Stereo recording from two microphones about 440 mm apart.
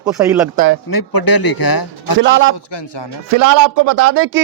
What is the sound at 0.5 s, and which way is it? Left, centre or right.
Speech, right.